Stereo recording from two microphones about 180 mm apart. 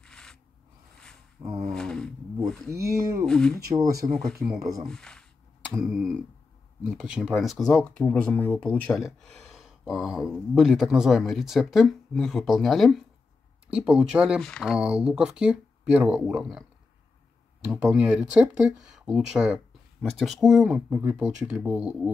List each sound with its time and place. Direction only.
0.0 s a sound: 5° left (ahead or behind)
1.7 s roaring cats: 5° left (ahead or behind)
2.7 s speech: 15° right (ahead or behind)
3.3 s speech: 5° left (ahead or behind)
3.5 s speech: 20° right (ahead or behind)
4.8 s speech: 5° left (ahead or behind)
17.9 s speech: 5° right (ahead or behind)